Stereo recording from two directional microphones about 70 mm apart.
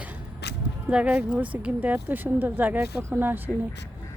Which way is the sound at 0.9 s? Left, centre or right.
Centre.